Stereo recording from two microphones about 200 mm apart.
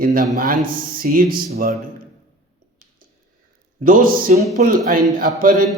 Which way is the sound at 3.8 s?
45° right (ahead or behind).